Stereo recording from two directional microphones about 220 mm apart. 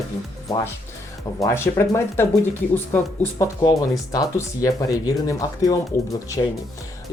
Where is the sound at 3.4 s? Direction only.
20° left (ahead or behind).